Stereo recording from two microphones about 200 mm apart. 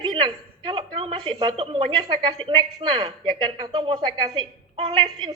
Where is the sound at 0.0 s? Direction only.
25° right (ahead or behind).